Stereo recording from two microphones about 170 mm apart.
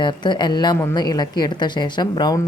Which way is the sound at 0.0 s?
25° left (ahead or behind).